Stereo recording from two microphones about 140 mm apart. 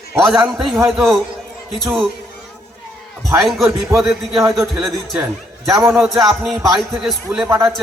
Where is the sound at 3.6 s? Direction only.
20° right (ahead or behind).